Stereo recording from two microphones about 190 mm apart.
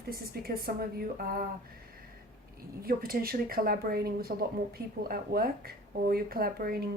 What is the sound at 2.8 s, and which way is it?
Speech, 50° right (ahead or behind).